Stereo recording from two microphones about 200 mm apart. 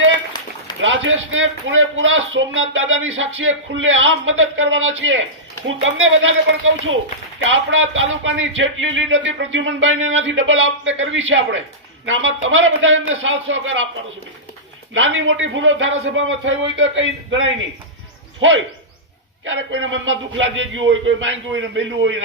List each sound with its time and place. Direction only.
0.8 s speech: 75° right (ahead or behind)
14.9 s speech: 75° right (ahead or behind)